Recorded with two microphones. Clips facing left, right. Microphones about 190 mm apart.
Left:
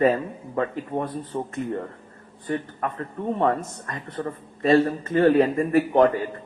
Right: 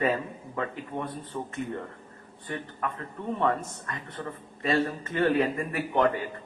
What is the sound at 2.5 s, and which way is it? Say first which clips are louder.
A man's voice: left 6 dB; 40° left (ahead or behind).